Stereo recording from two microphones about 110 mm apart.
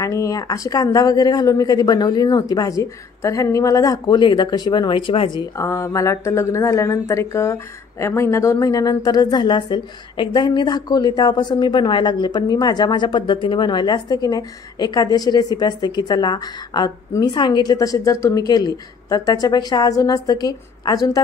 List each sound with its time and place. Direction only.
0.0 s speech: 30° left (ahead or behind); by 5.4 s 50° left (ahead or behind)
5.6 s speech: 25° left (ahead or behind)